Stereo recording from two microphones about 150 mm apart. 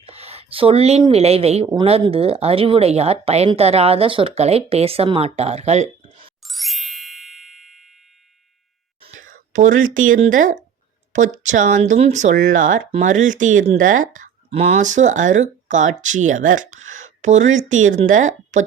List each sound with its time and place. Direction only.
0.0 s a sound: 40° right (ahead or behind)
1.1 s speech: 45° right (ahead or behind)
6.4 s ding: centre (ahead or behind)
9.2 s speech: 60° right (ahead or behind)
14.5 s speech: 45° right (ahead or behind)